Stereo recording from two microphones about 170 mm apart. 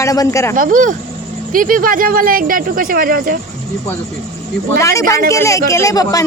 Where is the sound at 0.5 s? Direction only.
50° right (ahead or behind).